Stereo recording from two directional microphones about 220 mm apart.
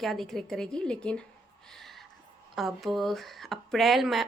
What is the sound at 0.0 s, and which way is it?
Speech, centre (ahead or behind).